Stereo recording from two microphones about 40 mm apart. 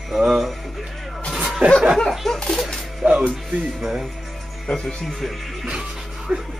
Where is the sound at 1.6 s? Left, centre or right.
Right.